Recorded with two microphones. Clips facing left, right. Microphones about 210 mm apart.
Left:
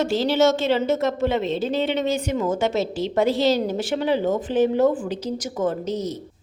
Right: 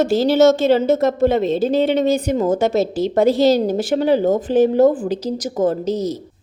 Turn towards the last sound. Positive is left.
turn(degrees=-35)  # may be behind; listen again after turning